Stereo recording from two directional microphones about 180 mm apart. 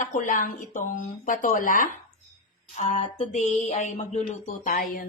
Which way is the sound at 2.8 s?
35° left (ahead or behind).